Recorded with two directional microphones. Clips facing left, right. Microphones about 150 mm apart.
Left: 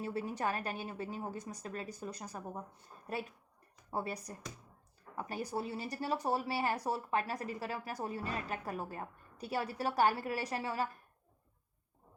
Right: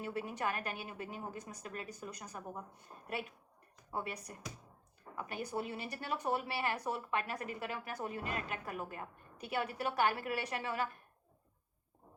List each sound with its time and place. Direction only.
0.0 s speech: 35° left (ahead or behind)